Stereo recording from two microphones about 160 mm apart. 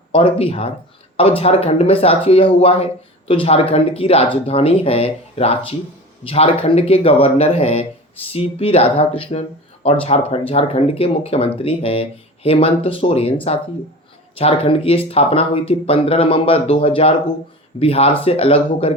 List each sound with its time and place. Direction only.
0.1 s speech: 35° left (ahead or behind)